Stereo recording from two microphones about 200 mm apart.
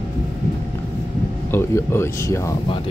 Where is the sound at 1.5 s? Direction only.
10° left (ahead or behind).